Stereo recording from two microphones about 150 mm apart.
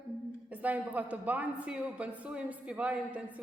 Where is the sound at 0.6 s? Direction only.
10° right (ahead or behind).